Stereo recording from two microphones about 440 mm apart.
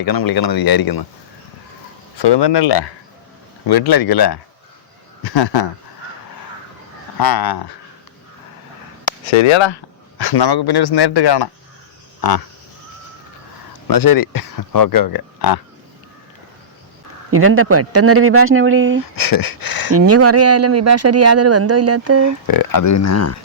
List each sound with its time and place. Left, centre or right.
0.0 s speech: left
2.1 s speech: left
3.7 s speech: left
7.2 s speech: left
9.2 s speech: left
10.2 s speech: left
13.8 s speech: left
17.3 s speech: right
19.1 s speech: left
20.1 s speech: right
22.3 s speech: left